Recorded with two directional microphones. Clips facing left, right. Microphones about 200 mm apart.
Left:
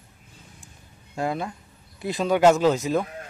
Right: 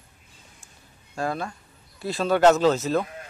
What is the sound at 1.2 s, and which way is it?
A man's voice, 20° left (ahead or behind).